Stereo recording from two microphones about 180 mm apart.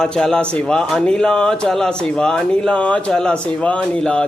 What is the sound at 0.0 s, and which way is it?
Speech, 5° left (ahead or behind).